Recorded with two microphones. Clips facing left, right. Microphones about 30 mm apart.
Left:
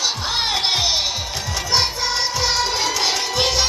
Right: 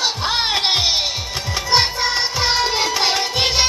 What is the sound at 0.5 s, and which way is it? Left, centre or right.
Music, right.